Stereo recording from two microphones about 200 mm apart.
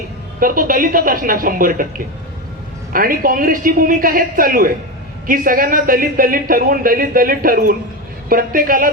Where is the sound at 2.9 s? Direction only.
45° right (ahead or behind).